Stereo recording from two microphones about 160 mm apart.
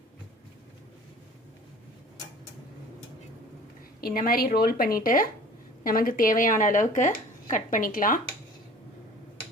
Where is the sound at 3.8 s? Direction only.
65° left (ahead or behind).